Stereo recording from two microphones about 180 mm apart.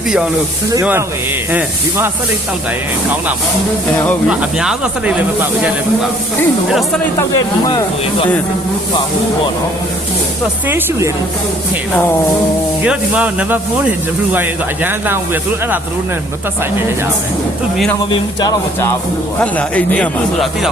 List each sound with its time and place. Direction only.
0.7 s speech: 15° right (ahead or behind)
4.3 s speech: 5° right (ahead or behind)
7.2 s speech: 20° left (ahead or behind)
10.7 s speech: 10° right (ahead or behind)
12.8 s speech: 5° right (ahead or behind)
18.1 s speech: 25° left (ahead or behind)
19.4 s speech: 10° left (ahead or behind)